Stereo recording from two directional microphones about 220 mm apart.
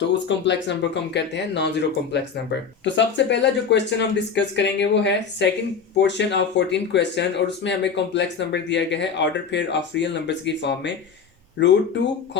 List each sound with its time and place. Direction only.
0.1 s speech: 55° left (ahead or behind)
2.8 s speech: 55° left (ahead or behind)